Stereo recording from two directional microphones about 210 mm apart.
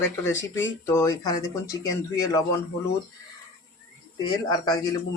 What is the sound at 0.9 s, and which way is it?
Speech, 15° left (ahead or behind).